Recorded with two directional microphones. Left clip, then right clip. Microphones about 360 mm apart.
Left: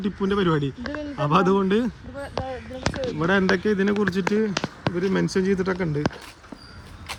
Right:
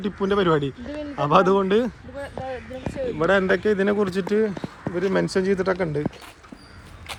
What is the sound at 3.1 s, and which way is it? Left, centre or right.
Speech, centre.